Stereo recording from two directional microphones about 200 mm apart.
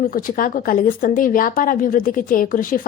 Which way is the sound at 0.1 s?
45° left (ahead or behind).